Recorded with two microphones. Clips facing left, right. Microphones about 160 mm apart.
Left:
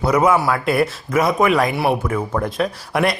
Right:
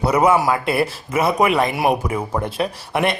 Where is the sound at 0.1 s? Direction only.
10° right (ahead or behind).